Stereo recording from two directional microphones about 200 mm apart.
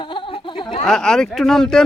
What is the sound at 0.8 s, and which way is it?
Speech, 5° left (ahead or behind).